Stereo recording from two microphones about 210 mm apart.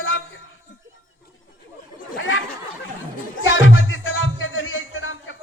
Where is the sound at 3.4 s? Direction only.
70° left (ahead or behind).